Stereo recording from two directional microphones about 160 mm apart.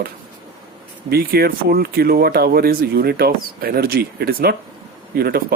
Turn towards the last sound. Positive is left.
turn(degrees=-70)  # may be behind; listen again after turning